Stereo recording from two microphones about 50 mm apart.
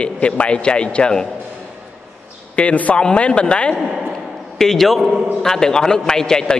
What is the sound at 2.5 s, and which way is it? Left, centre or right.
A man's voice, left.